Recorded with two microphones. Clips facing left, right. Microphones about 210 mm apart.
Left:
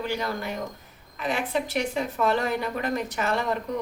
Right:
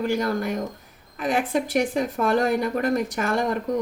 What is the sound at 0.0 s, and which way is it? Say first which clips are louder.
A woman's voice: right 6 dB; 45° right (ahead or behind).